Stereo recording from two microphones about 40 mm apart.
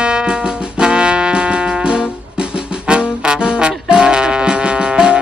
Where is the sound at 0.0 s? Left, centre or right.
Right.